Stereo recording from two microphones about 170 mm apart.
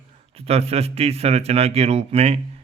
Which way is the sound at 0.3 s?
35° right (ahead or behind).